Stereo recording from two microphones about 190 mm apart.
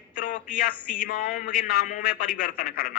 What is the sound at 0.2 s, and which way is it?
A man's voice, 45° left (ahead or behind).